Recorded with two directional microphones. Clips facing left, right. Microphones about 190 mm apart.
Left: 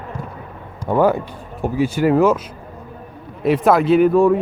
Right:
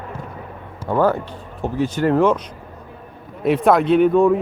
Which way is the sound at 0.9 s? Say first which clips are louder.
Left 2 dB; 15° left (ahead or behind).